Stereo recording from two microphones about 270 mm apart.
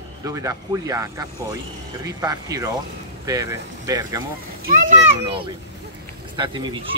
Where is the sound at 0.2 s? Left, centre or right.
Centre.